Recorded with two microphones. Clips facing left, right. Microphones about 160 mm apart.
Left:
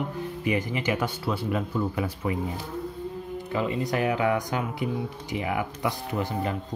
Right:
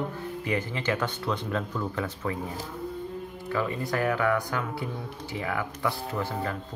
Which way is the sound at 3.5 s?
20° left (ahead or behind).